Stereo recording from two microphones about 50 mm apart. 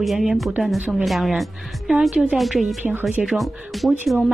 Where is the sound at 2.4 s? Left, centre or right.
Centre.